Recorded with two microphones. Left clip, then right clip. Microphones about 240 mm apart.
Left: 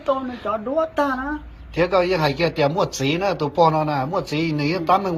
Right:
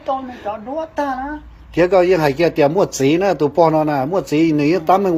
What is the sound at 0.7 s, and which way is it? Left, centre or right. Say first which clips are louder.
Speech: left 2 dB; centre.